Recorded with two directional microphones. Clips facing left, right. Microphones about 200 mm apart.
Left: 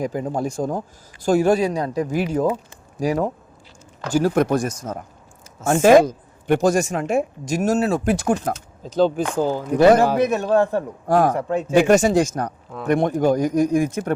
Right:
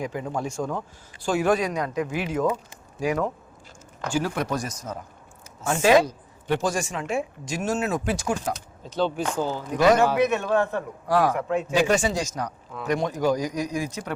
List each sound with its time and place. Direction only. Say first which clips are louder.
0.0 s a man's voice: left 5 dB; 40° left (ahead or behind)
8.0 s speech: left 7 dB; 60° left (ahead or behind)
8.8 s a woman's voice: left 7 dB; 45° left (ahead or behind)
11.3 s a man's voice: left 3 dB; 35° left (ahead or behind)
11.7 s a woman's voice: left 9 dB; 50° left (ahead or behind)
12.5 s speech: left 4 dB; 30° left (ahead or behind)
12.9 s a woman's voice: left 6 dB; 55° left (ahead or behind)